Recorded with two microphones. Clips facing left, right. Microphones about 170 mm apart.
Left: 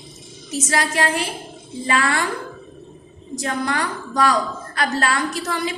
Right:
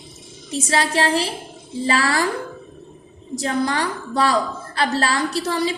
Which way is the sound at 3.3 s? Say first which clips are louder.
Right 2 dB; 35° right (ahead or behind).